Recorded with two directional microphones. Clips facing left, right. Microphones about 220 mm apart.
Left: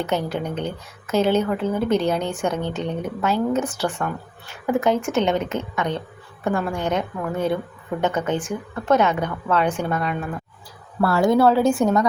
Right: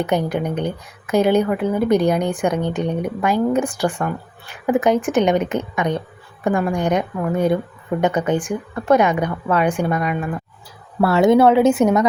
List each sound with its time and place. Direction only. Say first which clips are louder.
0.0 s speech: right 4 dB; 15° right (ahead or behind)
11.0 s speech: right 4 dB; 20° right (ahead or behind)